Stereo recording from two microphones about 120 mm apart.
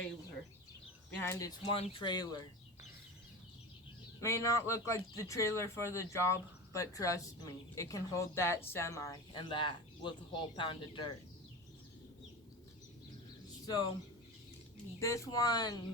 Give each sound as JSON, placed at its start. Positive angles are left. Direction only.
{"t": 1.2, "sound": "speech", "side_deg": 30}
{"t": 1.7, "sound": "speech", "side_deg": 50}
{"t": 4.2, "sound": "speech", "side_deg": 25}
{"t": 9.3, "sound": "speech", "side_deg": 40}
{"t": 14.9, "sound": "speech", "side_deg": 25}